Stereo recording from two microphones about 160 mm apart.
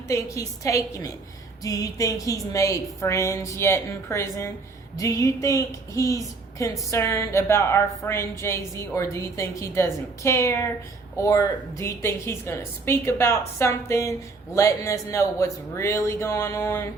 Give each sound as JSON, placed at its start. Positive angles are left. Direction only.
{"t": 0.1, "sound": "a woman's voice", "side_deg": 20}